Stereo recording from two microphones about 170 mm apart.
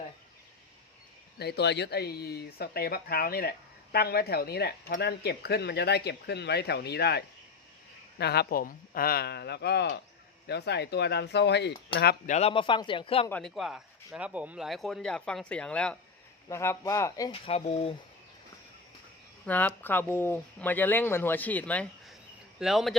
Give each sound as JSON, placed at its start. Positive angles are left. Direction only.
{"t": 1.4, "sound": "speech", "side_deg": 75}
{"t": 12.2, "sound": "a man's voice", "side_deg": 40}
{"t": 13.3, "sound": "speech", "side_deg": 0}
{"t": 17.4, "sound": "a man's voice", "side_deg": 35}
{"t": 19.5, "sound": "speech", "side_deg": 10}